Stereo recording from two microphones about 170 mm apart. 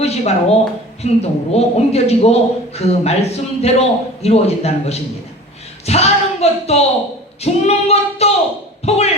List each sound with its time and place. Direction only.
0.0 s a man's voice: 40° left (ahead or behind)
7.4 s singing: 40° left (ahead or behind)
8.8 s speech: 40° left (ahead or behind)